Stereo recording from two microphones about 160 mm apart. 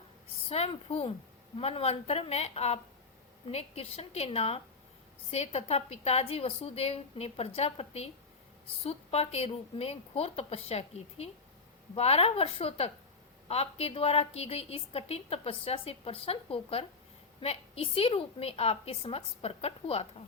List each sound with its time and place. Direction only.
0.4 s a woman's voice: 40° left (ahead or behind)